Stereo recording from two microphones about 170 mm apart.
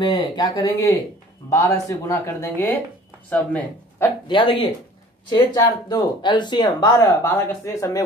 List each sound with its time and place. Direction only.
0.0 s speech: 25° left (ahead or behind)
4.3 s speech: 30° left (ahead or behind)
7.1 s speech: 15° left (ahead or behind)